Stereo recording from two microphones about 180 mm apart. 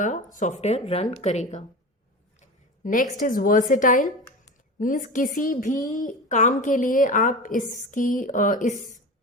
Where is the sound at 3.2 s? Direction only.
50° left (ahead or behind).